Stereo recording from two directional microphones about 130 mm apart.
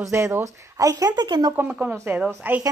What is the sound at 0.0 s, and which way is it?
Speech, 20° right (ahead or behind).